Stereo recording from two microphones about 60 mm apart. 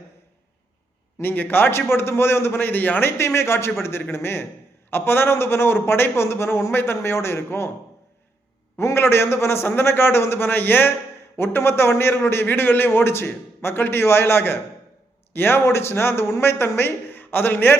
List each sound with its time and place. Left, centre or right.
1.2 s a man's voice: left
8.8 s a man's voice: left